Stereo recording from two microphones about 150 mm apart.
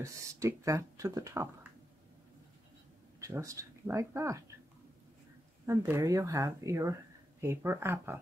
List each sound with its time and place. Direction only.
0.0 s speech: 20° right (ahead or behind)
3.2 s speech: 20° right (ahead or behind)
5.7 s speech: 20° right (ahead or behind)